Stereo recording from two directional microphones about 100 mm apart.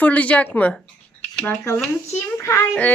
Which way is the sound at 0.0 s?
15° left (ahead or behind).